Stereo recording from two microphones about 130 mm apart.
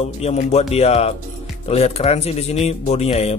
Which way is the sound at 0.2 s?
55° left (ahead or behind).